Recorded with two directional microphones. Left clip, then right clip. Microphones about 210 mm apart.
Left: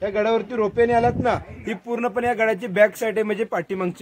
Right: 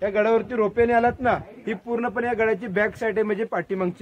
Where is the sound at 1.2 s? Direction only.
40° left (ahead or behind).